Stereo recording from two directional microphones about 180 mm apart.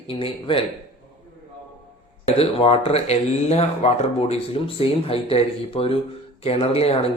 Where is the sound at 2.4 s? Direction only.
35° left (ahead or behind).